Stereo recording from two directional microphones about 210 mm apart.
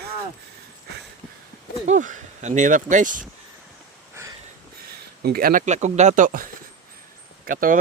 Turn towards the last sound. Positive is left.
turn(degrees=-40)  # may be behind; listen again after turning